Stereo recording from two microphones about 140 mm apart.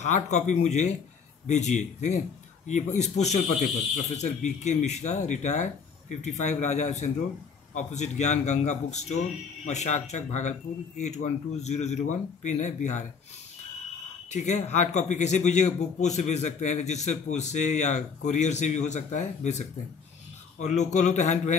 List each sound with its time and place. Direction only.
0.0 s a man's voice: 55° left (ahead or behind)
14.3 s a man's voice: 55° left (ahead or behind)